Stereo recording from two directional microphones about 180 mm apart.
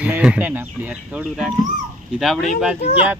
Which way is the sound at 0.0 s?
5° right (ahead or behind).